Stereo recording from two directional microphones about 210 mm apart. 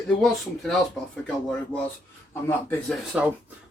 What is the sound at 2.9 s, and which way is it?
Speech, 5° right (ahead or behind).